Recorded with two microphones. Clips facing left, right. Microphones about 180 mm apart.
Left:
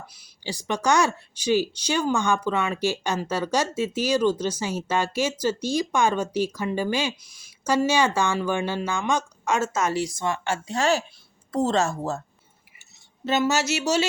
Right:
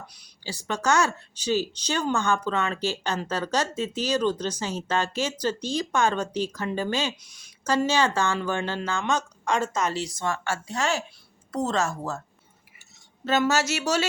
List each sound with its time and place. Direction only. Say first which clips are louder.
0.4 s a woman's voice: left 2 dB; 15° left (ahead or behind)
13.2 s speech: even; 10° left (ahead or behind)